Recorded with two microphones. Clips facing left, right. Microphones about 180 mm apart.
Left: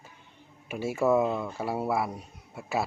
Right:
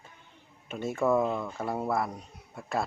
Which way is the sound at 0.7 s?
5° left (ahead or behind).